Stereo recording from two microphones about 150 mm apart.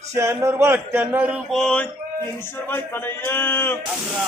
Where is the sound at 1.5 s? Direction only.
5° left (ahead or behind).